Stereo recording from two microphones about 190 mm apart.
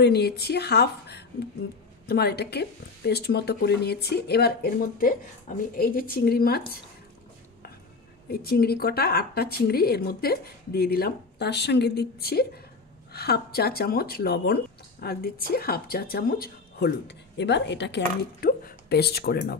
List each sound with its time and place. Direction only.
0.0 s speech: 60° left (ahead or behind)
8.3 s speech: 55° left (ahead or behind)